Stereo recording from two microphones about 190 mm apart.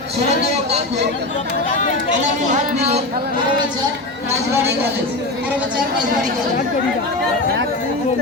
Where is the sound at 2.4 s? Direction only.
40° right (ahead or behind).